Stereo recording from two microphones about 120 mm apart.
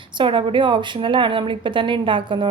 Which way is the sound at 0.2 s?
45° right (ahead or behind).